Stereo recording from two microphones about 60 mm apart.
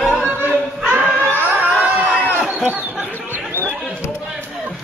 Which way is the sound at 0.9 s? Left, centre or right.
Right.